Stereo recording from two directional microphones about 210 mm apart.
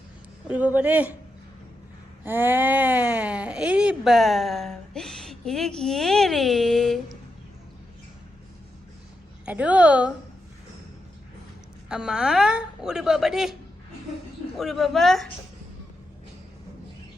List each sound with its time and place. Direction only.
0.4 s speech: 5° right (ahead or behind)
2.2 s speech: 10° right (ahead or behind)
9.5 s speech: 5° right (ahead or behind)
11.9 s speech: 5° right (ahead or behind)